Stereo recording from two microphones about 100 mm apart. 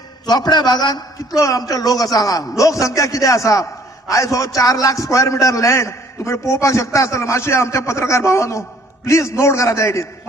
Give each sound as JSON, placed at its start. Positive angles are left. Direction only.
{"t": 0.3, "sound": "a man's voice", "side_deg": 45}
{"t": 1.4, "sound": "a man's voice", "side_deg": 35}